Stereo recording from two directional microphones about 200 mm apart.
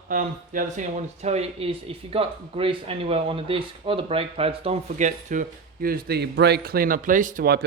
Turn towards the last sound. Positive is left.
turn(degrees=-45)  # may be behind; listen again after turning